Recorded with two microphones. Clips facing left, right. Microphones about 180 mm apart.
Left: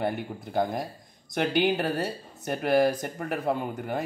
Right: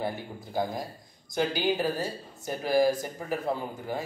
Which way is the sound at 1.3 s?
60° left (ahead or behind).